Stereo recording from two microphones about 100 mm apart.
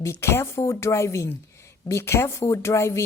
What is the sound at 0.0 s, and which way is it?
A woman's voice, 25° left (ahead or behind).